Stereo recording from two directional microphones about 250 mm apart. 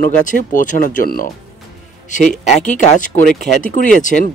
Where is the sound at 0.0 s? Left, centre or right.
Left.